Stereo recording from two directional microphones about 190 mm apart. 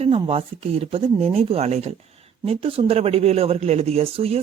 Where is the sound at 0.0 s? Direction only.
30° right (ahead or behind).